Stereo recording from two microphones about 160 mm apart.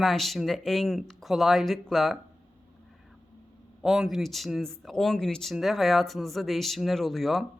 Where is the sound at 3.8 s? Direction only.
Centre (ahead or behind).